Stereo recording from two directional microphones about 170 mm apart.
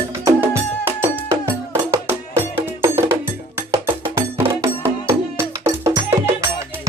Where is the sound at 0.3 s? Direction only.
15° right (ahead or behind).